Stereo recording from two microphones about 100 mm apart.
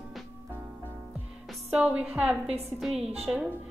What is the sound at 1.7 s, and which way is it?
Speech, 10° right (ahead or behind).